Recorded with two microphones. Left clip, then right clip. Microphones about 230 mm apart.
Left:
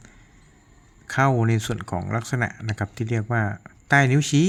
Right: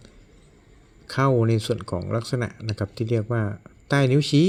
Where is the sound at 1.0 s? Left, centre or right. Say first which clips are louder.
Even; centre.